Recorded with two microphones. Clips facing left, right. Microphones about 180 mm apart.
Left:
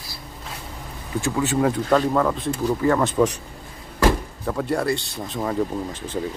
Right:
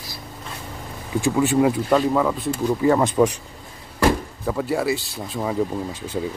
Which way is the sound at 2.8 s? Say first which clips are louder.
Right 2 dB; 15° right (ahead or behind).